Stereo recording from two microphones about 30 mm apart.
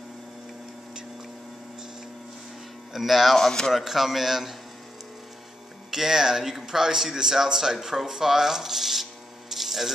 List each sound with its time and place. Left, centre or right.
2.9 s speech: centre
3.3 s speech: centre
3.7 s speech: centre
5.9 s speech: centre
9.5 s a sound: centre